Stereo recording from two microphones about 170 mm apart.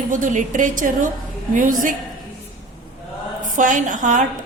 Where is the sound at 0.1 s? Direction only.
50° right (ahead or behind).